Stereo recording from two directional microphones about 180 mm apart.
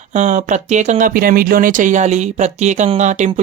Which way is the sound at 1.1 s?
50° right (ahead or behind).